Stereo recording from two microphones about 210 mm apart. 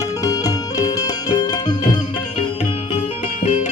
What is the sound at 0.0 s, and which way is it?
Music, 15° left (ahead or behind).